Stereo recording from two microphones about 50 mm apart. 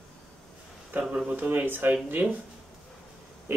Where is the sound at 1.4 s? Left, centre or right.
Right.